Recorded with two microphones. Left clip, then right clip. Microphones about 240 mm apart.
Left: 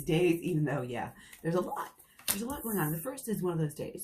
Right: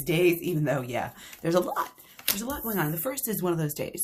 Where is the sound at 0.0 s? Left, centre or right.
Right.